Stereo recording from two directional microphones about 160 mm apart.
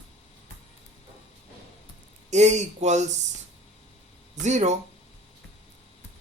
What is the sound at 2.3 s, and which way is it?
Speech, 45° right (ahead or behind).